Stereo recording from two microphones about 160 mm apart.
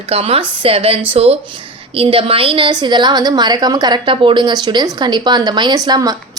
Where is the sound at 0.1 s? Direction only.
35° right (ahead or behind).